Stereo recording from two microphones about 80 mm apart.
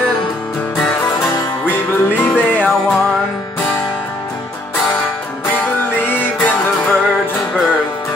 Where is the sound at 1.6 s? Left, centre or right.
Left.